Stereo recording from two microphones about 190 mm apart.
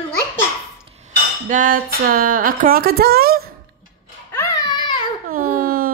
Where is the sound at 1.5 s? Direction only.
45° right (ahead or behind).